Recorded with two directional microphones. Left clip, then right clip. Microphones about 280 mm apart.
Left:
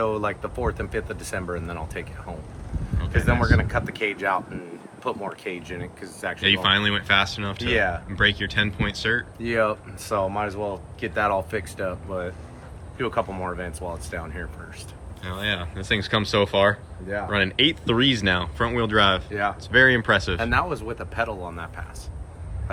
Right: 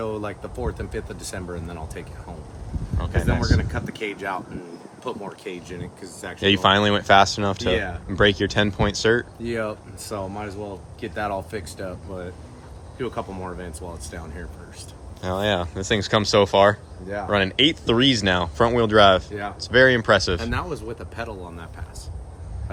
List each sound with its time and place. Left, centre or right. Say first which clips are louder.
0.0 s speech: left 4 dB; centre